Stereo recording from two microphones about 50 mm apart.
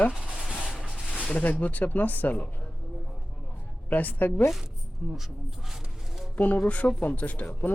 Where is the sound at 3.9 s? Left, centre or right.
Left.